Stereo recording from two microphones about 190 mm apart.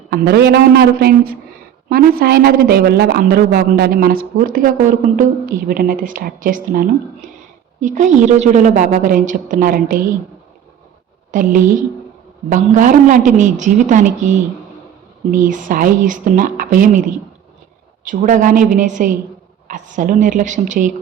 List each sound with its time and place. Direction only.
0.1 s a woman's voice: 55° right (ahead or behind)
11.3 s a woman's voice: 45° right (ahead or behind)
18.0 s a woman's voice: 40° right (ahead or behind)